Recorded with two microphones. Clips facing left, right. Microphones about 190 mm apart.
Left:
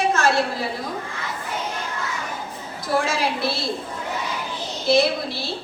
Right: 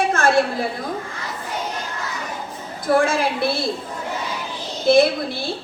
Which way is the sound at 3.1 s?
50° right (ahead or behind).